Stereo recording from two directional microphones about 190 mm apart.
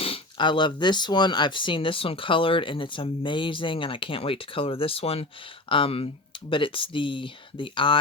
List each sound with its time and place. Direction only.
0.0 s speech: 25° left (ahead or behind)